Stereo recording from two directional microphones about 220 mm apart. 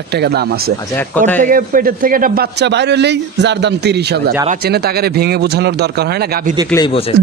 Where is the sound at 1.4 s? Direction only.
40° right (ahead or behind).